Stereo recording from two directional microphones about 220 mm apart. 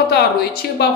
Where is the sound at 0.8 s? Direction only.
50° left (ahead or behind).